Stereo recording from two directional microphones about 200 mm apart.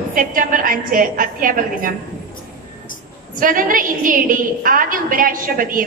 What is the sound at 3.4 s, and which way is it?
A woman's voice, 45° right (ahead or behind).